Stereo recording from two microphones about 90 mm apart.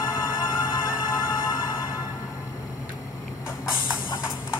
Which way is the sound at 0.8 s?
55° left (ahead or behind).